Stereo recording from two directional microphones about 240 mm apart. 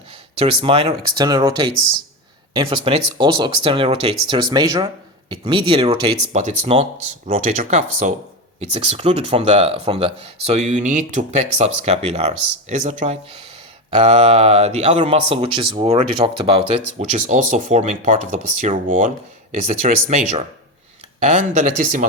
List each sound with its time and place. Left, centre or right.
0.3 s speech: right
6.3 s speech: right